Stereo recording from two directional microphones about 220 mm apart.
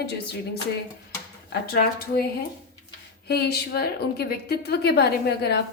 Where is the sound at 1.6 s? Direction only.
45° left (ahead or behind).